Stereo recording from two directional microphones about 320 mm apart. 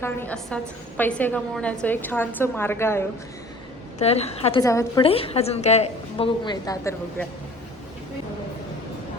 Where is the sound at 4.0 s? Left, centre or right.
Centre.